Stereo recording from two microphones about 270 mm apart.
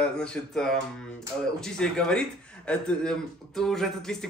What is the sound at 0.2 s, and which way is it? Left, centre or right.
Speech, centre.